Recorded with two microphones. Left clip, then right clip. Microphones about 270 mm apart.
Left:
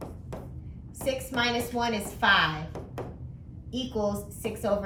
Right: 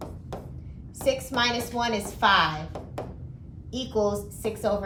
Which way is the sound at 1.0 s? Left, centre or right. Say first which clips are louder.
Right 4 dB; centre.